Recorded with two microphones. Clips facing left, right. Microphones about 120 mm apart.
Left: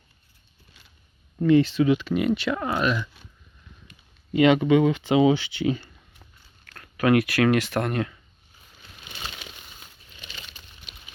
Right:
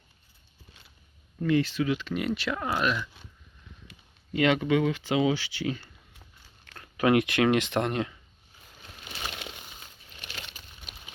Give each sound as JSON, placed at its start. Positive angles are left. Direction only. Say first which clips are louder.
{"t": 1.4, "sound": "speech", "louder": "left 7 dB", "side_deg": 25}
{"t": 2.0, "sound": "speech", "louder": "left 6 dB", "side_deg": 5}
{"t": 4.4, "sound": "speech", "louder": "left 6 dB", "side_deg": 20}
{"t": 6.7, "sound": "speech", "louder": "left 3 dB", "side_deg": -20}
{"t": 10.2, "sound": "a sound", "louder": "right 1 dB", "side_deg": -65}